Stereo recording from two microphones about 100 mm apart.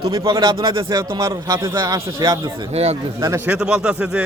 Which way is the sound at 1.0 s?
50° right (ahead or behind).